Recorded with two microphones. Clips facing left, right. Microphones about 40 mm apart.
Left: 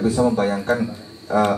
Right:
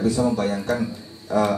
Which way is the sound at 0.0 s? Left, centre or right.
Centre.